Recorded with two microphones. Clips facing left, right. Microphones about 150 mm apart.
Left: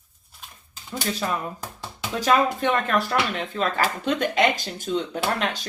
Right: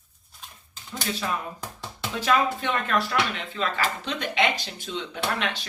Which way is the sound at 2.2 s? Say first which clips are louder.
Left 3 dB; 45° left (ahead or behind).